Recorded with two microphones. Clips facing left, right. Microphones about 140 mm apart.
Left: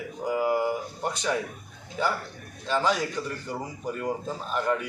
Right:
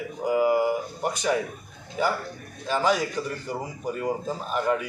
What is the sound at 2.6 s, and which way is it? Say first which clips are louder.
Speech: right 2 dB; 10° right (ahead or behind).